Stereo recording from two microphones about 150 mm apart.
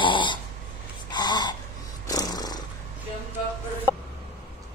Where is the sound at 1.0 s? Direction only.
30° left (ahead or behind).